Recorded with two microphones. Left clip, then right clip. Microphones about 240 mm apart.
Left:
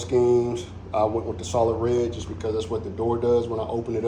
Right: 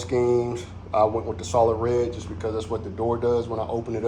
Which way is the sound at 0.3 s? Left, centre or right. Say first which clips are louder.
Left 2 dB; centre.